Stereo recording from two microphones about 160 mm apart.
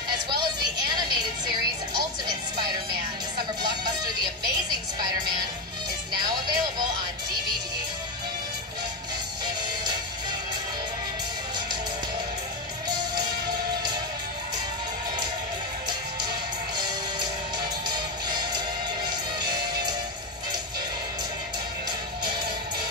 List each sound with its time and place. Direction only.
0.1 s music: 25° right (ahead or behind)
3.6 s music: 25° right (ahead or behind)
6.1 s music: 25° right (ahead or behind)
16.8 s music: 25° right (ahead or behind)
19.4 s music: 25° right (ahead or behind)